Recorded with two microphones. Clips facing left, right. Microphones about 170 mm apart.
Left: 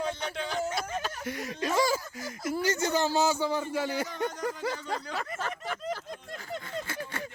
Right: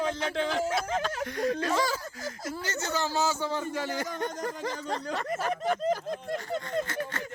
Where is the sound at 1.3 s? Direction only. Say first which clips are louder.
Right 3 dB; 5° left (ahead or behind).